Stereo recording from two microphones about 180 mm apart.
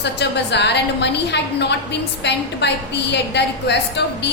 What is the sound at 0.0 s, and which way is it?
A woman's voice, 70° left (ahead or behind).